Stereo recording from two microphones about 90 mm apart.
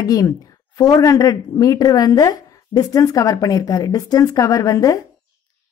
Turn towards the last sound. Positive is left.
turn(degrees=40)  # may be behind; listen again after turning